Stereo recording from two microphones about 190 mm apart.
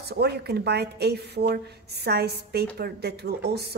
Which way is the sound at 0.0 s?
60° right (ahead or behind).